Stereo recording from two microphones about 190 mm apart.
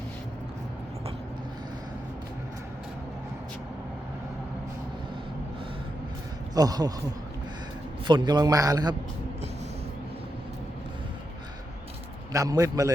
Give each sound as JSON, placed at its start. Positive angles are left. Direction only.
{"t": 6.5, "sound": "speech", "side_deg": -20}
{"t": 8.0, "sound": "a man's voice", "side_deg": -25}
{"t": 12.3, "sound": "a man's voice", "side_deg": -15}